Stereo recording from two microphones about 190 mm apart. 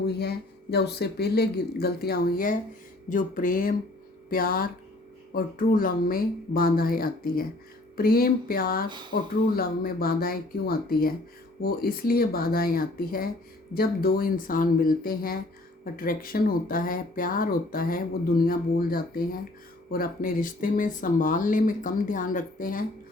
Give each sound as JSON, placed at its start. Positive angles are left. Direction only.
{"t": 0.0, "sound": "speech", "side_deg": 55}
{"t": 9.1, "sound": "speech", "side_deg": 65}
{"t": 9.6, "sound": "speech", "side_deg": 50}